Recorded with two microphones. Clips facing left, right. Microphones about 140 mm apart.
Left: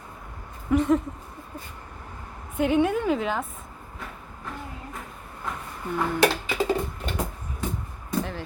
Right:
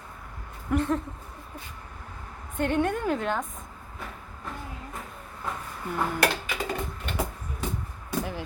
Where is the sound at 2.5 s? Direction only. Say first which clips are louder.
Left 4 dB; 5° left (ahead or behind).